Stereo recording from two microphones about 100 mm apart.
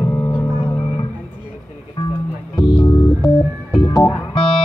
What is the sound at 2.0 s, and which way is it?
Music, 55° left (ahead or behind).